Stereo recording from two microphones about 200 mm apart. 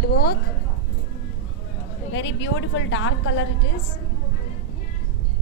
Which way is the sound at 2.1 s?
65° left (ahead or behind).